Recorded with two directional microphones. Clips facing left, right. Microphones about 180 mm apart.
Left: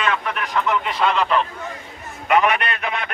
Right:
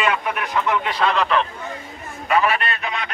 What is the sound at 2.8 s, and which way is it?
Honk, 55° left (ahead or behind).